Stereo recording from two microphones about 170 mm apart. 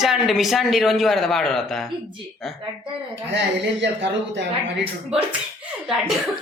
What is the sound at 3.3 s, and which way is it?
Speech, 90° right.